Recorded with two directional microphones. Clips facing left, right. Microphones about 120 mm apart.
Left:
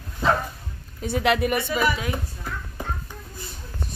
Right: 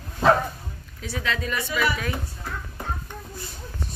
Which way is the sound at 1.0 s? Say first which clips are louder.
Left 8 dB; 60° left (ahead or behind).